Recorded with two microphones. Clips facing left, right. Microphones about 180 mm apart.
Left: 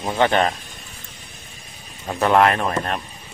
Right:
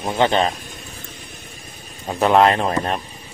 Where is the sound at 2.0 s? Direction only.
15° right (ahead or behind).